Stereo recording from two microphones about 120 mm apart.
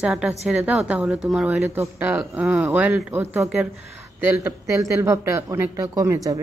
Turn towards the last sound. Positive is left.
turn(degrees=-25)  # may be behind; listen again after turning